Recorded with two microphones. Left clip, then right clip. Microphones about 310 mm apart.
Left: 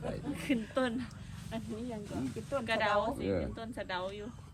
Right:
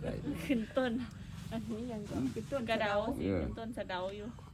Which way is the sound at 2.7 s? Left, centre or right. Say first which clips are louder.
Left 3 dB; left.